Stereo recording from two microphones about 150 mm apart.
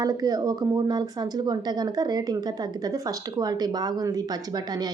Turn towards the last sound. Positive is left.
turn(degrees=-25)  # may be behind; listen again after turning